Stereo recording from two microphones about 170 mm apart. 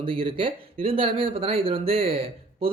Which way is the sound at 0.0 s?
30° right (ahead or behind).